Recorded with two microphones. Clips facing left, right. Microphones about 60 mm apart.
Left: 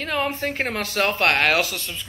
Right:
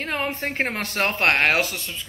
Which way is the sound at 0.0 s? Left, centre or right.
Right.